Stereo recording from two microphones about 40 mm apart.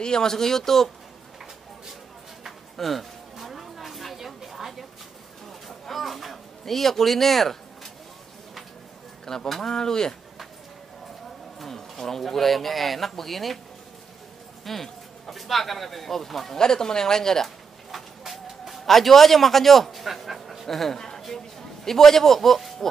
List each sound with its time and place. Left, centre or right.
0.0 s speech: centre
2.4 s a sound: centre
5.7 s a sound: centre
9.3 s speech: centre
12.0 s speech: centre
14.6 s speech: centre
17.9 s music: centre
21.2 s a man's voice: centre